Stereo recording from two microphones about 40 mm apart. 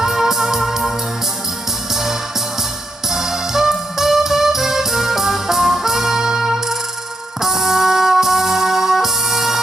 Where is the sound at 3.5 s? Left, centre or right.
Centre.